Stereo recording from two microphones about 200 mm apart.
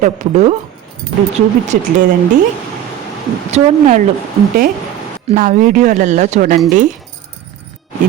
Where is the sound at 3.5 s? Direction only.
40° right (ahead or behind).